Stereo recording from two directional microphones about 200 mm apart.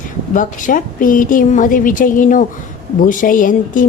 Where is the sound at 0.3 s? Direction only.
45° left (ahead or behind).